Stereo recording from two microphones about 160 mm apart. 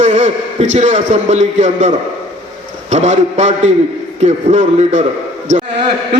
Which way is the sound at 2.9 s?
45° right (ahead or behind).